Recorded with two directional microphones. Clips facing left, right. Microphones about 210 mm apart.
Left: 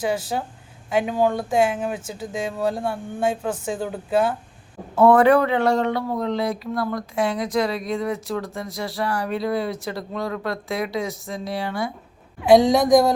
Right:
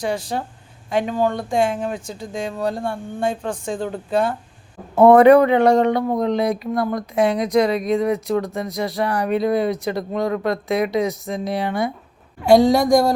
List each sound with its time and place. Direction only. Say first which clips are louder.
0.0 s speech: even; 5° left (ahead or behind)
4.9 s speech: right 5 dB; 15° right (ahead or behind)
12.5 s speech: right 1 dB; centre (ahead or behind)